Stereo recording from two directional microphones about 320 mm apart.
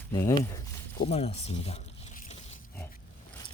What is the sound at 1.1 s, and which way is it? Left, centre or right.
Speech, centre.